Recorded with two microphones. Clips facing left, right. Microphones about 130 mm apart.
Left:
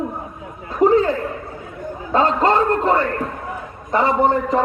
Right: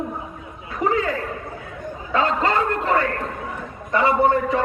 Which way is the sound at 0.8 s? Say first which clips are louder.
Left 7 dB; 35° left (ahead or behind).